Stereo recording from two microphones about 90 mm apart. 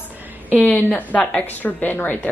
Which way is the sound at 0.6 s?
15° left (ahead or behind).